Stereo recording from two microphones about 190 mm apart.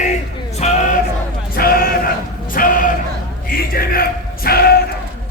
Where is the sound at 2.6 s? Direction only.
45° left (ahead or behind).